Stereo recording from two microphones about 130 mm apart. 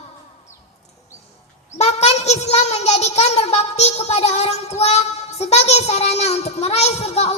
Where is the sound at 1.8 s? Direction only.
55° left (ahead or behind).